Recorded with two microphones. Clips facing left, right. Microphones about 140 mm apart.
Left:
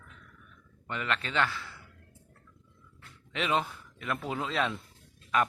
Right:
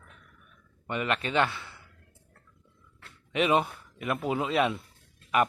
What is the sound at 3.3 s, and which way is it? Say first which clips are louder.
A man's voice: right 5 dB; 15° right (ahead or behind).